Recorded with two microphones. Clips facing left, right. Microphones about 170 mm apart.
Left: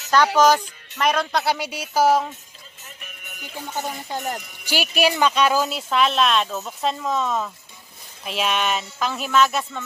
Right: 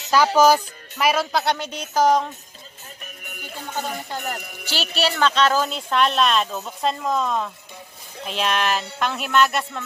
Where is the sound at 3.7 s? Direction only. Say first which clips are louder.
Even; 15° left (ahead or behind).